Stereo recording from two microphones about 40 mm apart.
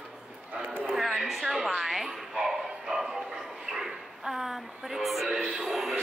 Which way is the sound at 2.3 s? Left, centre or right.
Centre.